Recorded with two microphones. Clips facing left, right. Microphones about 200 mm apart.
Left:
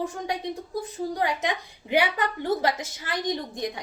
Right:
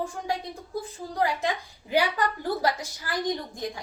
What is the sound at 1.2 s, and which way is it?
A woman's voice, 20° left (ahead or behind).